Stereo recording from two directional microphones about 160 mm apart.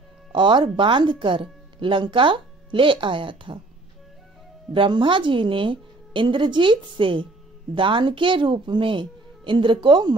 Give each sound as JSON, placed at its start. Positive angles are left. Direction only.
{"t": 0.3, "sound": "speech", "side_deg": -30}
{"t": 4.7, "sound": "speech", "side_deg": -30}